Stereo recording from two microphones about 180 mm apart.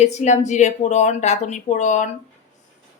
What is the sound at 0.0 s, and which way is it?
Speech, 40° left (ahead or behind).